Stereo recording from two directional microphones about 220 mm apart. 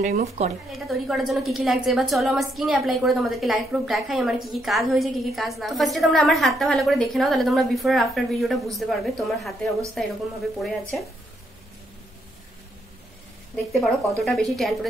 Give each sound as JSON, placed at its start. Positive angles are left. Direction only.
{"t": 0.0, "sound": "speech", "side_deg": -30}
{"t": 0.7, "sound": "a woman's voice", "side_deg": 0}
{"t": 13.7, "sound": "a woman's voice", "side_deg": 0}